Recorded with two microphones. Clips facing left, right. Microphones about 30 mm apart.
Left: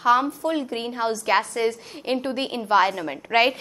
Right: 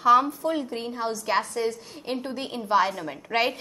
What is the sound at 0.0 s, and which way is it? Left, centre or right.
A woman's voice, centre.